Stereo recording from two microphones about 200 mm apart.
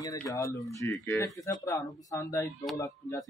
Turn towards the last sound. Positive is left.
turn(degrees=15)  # may be behind; listen again after turning